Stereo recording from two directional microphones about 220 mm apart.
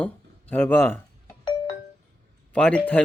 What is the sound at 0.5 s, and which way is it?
Speech, 10° left (ahead or behind).